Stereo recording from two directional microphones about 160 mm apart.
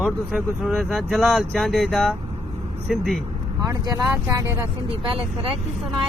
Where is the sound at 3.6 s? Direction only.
20° right (ahead or behind).